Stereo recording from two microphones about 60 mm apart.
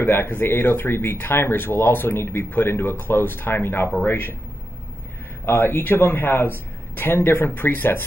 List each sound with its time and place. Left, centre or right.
0.0 s speech: left
5.4 s speech: left